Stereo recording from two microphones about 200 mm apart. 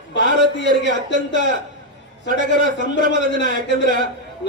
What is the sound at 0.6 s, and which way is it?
Speech, 65° left (ahead or behind).